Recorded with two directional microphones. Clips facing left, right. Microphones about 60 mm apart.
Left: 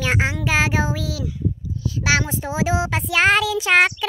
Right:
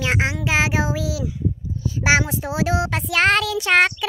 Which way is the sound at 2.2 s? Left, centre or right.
Centre.